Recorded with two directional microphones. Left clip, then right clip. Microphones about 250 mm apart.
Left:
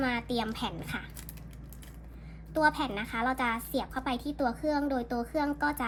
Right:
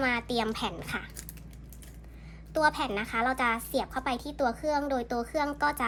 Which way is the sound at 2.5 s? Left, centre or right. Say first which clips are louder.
Right 1 dB; right.